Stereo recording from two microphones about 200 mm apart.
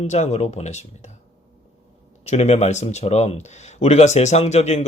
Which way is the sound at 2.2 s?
35° left (ahead or behind).